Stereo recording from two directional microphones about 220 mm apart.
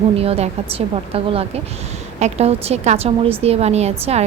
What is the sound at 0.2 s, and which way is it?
A woman's voice, 30° right (ahead or behind).